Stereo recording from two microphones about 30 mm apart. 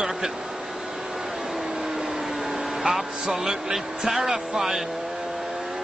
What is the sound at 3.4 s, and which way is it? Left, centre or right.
A man's voice, centre.